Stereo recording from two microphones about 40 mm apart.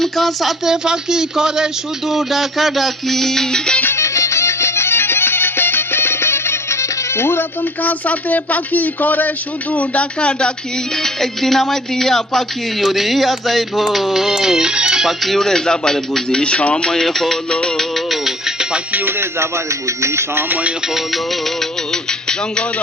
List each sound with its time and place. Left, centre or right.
0.0 s speech: centre
0.6 s a sound: centre
4.8 s music: left
7.8 s speech: left
9.7 s speech: left
10.9 s speech: centre
12.8 s a sound: centre
15.2 s speech: centre; by 17.0 s left
17.0 s speech: centre
17.5 s speech: left
17.9 s music: centre
20.8 s music: centre